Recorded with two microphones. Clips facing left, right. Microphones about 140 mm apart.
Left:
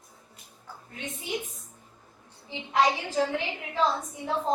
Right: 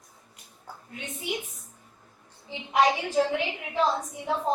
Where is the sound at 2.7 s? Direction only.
15° right (ahead or behind).